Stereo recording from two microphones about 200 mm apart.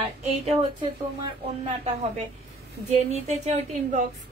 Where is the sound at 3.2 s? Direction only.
35° right (ahead or behind).